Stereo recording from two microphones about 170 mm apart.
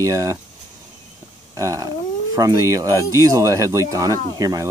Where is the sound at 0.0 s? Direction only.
20° right (ahead or behind).